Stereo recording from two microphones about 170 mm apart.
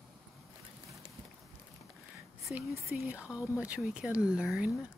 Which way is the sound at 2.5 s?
10° right (ahead or behind).